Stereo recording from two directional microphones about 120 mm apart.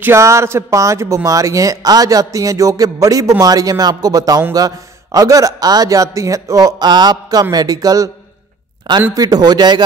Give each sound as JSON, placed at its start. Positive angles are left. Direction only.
{"t": 0.0, "sound": "a man's voice", "side_deg": -25}
{"t": 9.1, "sound": "a man's voice", "side_deg": -30}